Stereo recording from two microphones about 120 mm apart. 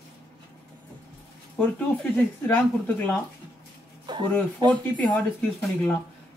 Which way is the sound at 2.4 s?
15° left (ahead or behind).